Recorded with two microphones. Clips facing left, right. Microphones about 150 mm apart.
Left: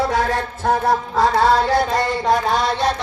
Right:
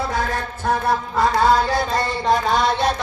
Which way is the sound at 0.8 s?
85° left.